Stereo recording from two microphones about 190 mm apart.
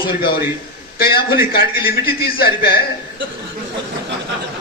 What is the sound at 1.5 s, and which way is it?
A man's voice, 50° left (ahead or behind).